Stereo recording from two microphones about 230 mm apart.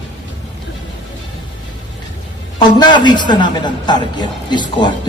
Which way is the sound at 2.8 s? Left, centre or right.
Centre.